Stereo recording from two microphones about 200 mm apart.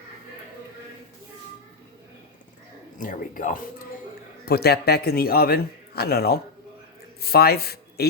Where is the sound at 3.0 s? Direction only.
40° left (ahead or behind).